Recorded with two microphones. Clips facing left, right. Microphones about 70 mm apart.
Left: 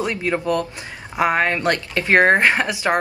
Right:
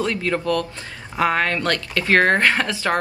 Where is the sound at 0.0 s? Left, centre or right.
Centre.